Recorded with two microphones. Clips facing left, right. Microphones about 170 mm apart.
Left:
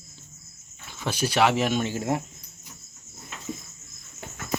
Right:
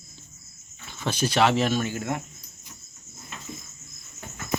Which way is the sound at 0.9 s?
10° left (ahead or behind).